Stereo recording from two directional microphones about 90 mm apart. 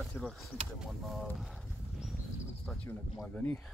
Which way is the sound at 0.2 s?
25° left (ahead or behind).